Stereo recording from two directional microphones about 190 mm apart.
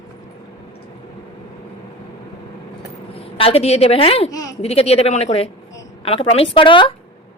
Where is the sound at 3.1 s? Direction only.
30° left (ahead or behind).